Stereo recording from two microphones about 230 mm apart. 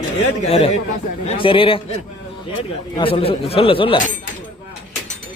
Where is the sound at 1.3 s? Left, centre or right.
Left.